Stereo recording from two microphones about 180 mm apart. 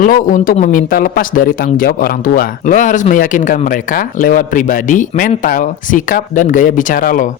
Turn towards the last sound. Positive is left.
turn(degrees=50)  # may be behind; listen again after turning